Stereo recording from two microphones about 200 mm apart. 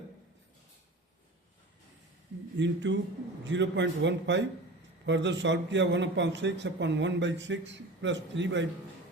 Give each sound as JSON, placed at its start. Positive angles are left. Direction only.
{"t": 2.6, "sound": "a man's voice", "side_deg": -65}